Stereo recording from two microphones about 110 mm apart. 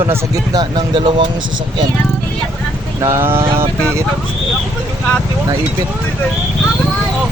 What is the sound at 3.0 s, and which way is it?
Speech, 25° right (ahead or behind).